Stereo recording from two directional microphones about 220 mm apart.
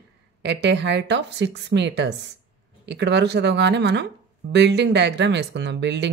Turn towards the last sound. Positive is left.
turn(degrees=-50)  # may be behind; listen again after turning